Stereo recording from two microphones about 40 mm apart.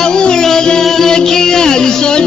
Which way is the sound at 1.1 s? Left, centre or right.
Centre.